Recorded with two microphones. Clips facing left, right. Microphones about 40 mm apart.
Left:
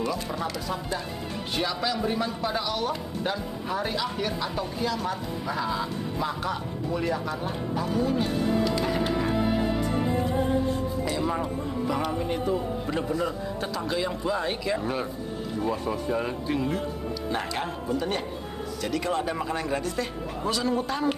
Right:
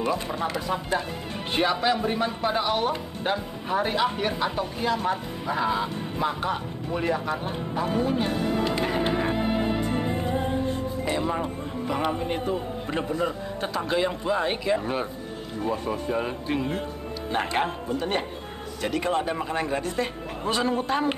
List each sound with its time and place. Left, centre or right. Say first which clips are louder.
0.3 s speech: right 3 dB; right
11.2 s speech: right 1 dB; centre
11.9 s speech: right 3 dB; right
15.9 s speech: even; centre
16.4 s speech: even; right